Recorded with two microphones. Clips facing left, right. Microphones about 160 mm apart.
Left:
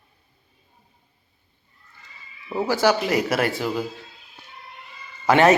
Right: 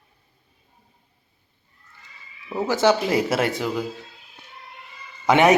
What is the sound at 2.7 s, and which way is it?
Speech, 25° right (ahead or behind).